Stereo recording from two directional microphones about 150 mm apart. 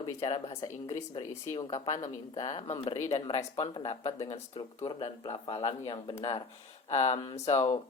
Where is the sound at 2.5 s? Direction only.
40° left (ahead or behind).